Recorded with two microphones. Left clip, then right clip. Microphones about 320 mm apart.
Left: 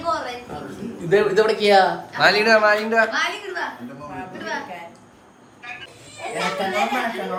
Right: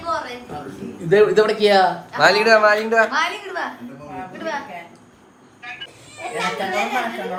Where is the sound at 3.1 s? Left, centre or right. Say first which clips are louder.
Right 2 dB; centre.